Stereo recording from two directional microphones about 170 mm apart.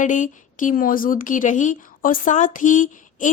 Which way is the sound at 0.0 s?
50° left (ahead or behind).